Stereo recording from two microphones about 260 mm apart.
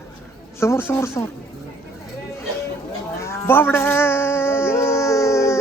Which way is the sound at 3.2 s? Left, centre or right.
Centre.